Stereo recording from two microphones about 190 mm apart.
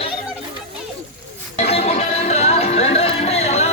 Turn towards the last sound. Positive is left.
turn(degrees=35)  # may be behind; listen again after turning